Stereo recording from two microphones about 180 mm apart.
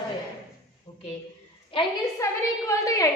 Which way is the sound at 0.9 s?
25° left (ahead or behind).